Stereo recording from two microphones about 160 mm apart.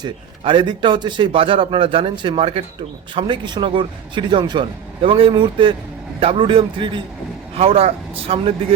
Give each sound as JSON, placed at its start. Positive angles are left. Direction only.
{"t": 0.0, "sound": "a man's voice", "side_deg": -30}